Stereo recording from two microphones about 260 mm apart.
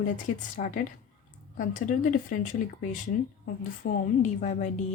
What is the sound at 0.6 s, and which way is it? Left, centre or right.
A woman's voice, left.